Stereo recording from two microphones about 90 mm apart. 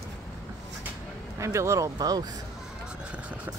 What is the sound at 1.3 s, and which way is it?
Speech, 35° right (ahead or behind).